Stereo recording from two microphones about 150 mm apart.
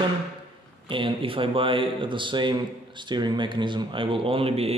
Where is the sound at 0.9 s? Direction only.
35° right (ahead or behind).